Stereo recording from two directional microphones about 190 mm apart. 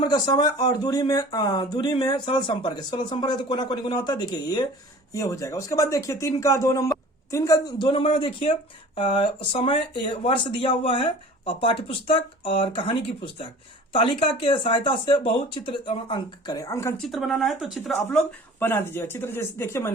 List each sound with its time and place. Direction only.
0.0 s speech: 20° left (ahead or behind)
17.0 s speech: centre (ahead or behind)